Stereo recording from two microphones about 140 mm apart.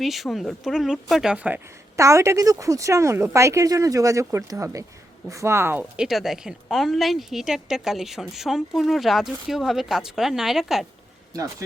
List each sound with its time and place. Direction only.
0.0 s speech: centre (ahead or behind)
2.0 s speech: 20° right (ahead or behind)
6.0 s speech: centre (ahead or behind)